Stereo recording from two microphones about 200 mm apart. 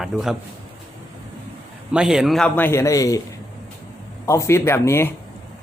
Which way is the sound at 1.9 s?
5° right (ahead or behind).